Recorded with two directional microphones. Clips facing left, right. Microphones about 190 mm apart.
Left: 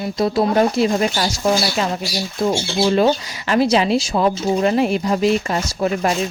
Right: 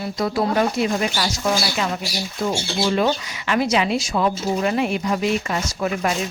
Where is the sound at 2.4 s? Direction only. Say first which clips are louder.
Left 4 dB; 30° left (ahead or behind).